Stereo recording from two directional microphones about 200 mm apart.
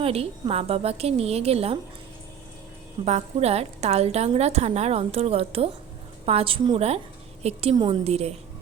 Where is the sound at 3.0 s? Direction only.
35° right (ahead or behind).